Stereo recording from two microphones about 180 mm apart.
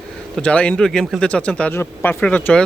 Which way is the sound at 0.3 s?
5° left (ahead or behind).